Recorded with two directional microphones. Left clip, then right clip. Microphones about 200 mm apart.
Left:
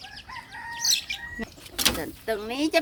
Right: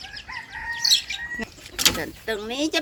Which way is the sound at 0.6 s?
25° left (ahead or behind).